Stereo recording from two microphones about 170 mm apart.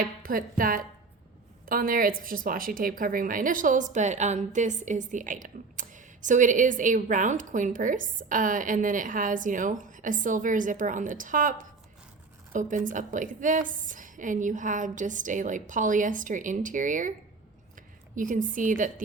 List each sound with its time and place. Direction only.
0.0 s a woman's voice: 55° right (ahead or behind)